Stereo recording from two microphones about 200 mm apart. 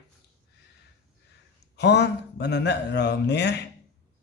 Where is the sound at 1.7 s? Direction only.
60° left (ahead or behind).